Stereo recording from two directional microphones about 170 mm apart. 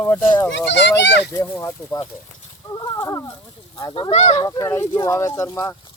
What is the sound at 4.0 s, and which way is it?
Speech, 35° left (ahead or behind).